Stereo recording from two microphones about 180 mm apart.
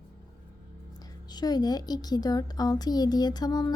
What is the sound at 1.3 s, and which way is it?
A woman's voice, 20° left (ahead or behind).